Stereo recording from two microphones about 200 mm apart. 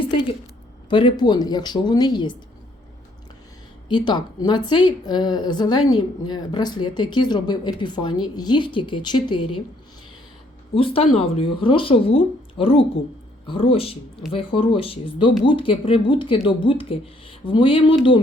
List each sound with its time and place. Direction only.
0.9 s a woman's voice: 25° left (ahead or behind)
3.8 s a woman's voice: 20° left (ahead or behind)
10.8 s a woman's voice: 25° left (ahead or behind)